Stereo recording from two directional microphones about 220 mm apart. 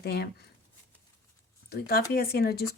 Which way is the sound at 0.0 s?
45° left (ahead or behind).